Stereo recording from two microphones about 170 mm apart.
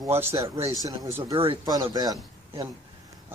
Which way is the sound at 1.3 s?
30° right (ahead or behind).